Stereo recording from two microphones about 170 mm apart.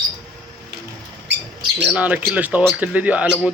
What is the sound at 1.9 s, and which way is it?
Speech, 10° right (ahead or behind).